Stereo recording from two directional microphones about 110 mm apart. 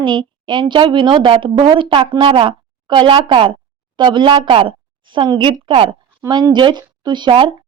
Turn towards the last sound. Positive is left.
turn(degrees=-45)  # may be behind; listen again after turning